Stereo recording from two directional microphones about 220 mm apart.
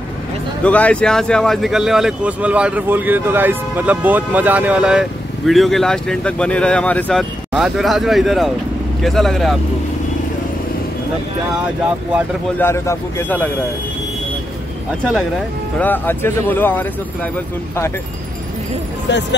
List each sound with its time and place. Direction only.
0.7 s speech: 5° left (ahead or behind)
12.5 s speech: 10° left (ahead or behind)
15.8 s speech: 10° left (ahead or behind)